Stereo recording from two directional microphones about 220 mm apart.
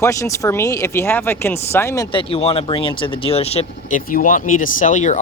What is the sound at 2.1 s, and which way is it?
Speech, 25° left (ahead or behind).